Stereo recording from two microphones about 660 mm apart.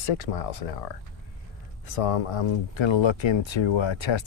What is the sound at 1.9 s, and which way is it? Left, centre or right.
Speech, left.